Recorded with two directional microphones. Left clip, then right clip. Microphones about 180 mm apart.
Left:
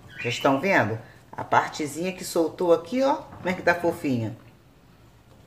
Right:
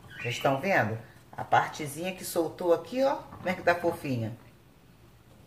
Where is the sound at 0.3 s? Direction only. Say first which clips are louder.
Left 5 dB; 30° left (ahead or behind).